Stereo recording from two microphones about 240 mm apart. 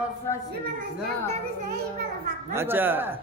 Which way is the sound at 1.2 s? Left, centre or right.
Right.